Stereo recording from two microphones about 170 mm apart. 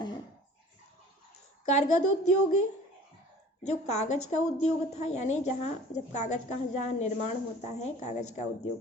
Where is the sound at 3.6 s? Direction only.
40° left (ahead or behind).